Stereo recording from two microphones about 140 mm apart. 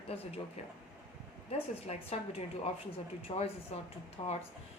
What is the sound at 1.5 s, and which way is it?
A woman's voice, 45° left (ahead or behind).